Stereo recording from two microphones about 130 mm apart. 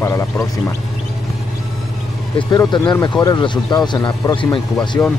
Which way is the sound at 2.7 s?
40° left (ahead or behind).